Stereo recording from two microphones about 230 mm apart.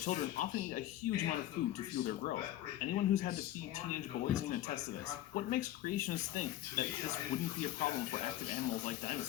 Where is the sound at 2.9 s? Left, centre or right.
Left.